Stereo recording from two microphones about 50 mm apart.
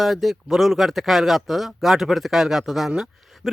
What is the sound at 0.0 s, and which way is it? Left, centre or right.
Speech, centre.